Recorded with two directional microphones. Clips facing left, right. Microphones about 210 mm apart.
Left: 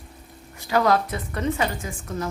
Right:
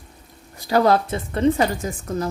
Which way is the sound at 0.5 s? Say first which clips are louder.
Right 3 dB; 35° right (ahead or behind).